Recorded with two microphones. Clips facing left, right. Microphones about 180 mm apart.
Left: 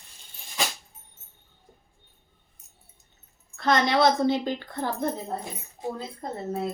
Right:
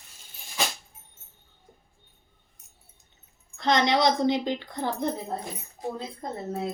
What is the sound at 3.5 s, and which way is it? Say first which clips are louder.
Speech: even; 20° right (ahead or behind).